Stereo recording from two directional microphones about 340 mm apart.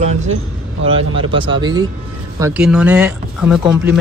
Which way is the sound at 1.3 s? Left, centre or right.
Centre.